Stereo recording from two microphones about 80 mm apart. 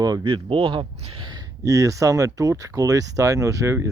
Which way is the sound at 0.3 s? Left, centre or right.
Right.